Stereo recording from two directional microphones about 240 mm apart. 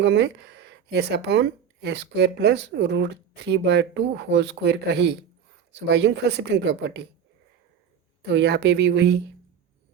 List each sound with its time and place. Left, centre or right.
0.0 s speech: right
8.3 s speech: right